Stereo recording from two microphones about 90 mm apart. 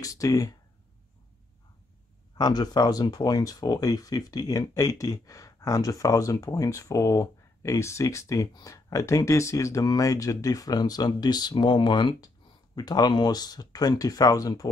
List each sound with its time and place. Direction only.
0.0 s speech: 40° left (ahead or behind)
2.3 s speech: 50° left (ahead or behind)